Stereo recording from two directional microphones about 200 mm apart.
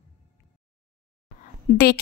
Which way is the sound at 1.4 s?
45° left (ahead or behind).